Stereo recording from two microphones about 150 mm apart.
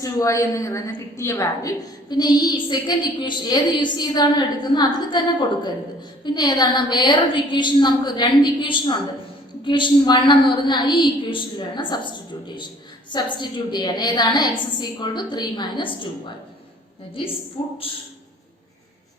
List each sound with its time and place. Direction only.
0.0 s a woman's voice: 20° left (ahead or behind)
6.2 s a woman's voice: 30° left (ahead or behind)
17.2 s a woman's voice: 35° left (ahead or behind)